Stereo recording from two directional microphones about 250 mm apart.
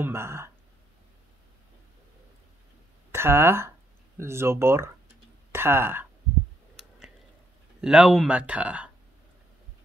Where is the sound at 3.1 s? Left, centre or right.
Centre.